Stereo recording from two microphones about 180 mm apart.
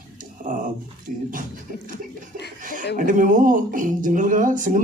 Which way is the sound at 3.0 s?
50° right (ahead or behind).